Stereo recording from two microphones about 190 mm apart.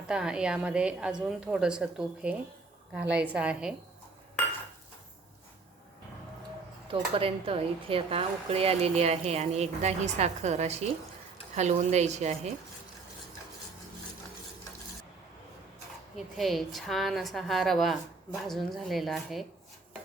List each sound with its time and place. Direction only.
0.1 s a woman's voice: 5° right (ahead or behind)
6.8 s speech: 30° right (ahead or behind)
16.1 s a woman's voice: centre (ahead or behind)